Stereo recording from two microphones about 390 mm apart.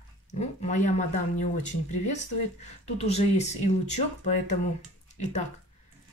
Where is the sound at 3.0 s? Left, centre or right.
Centre.